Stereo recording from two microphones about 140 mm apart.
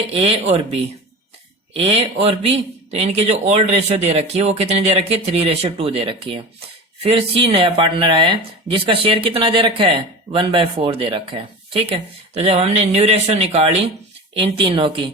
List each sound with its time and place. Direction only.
0.1 s speech: 45° right (ahead or behind)